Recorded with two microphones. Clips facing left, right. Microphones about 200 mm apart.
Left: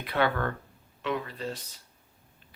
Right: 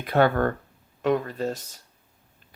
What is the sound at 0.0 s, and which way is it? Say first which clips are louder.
Speech: right 7 dB; 45° right (ahead or behind).